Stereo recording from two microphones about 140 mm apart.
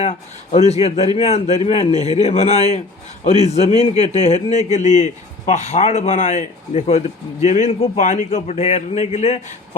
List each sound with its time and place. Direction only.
0.0 s a man's voice: 45° left (ahead or behind)